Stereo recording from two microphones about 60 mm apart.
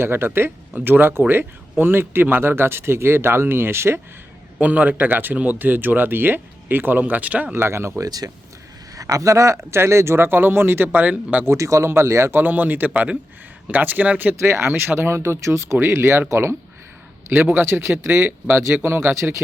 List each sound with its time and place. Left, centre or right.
0.0 s speech: right
4.6 s speech: right
7.5 s speech: right
8.0 s speech: right
9.0 s speech: right
11.0 s speech: right
11.4 s speech: right
12.3 s speech: right
14.3 s speech: right
17.2 s speech: right
19.1 s speech: right